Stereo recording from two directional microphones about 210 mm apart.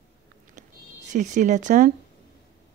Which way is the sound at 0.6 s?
35° right (ahead or behind).